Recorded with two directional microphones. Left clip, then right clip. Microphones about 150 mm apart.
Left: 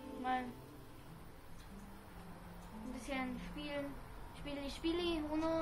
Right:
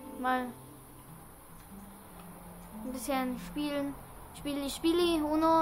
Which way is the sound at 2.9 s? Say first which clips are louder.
Right 9 dB; 50° right (ahead or behind).